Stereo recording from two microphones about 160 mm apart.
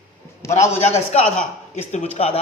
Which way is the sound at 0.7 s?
45° left (ahead or behind).